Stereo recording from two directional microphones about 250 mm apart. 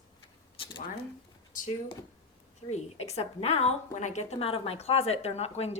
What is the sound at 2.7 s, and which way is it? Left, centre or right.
A woman's voice, left.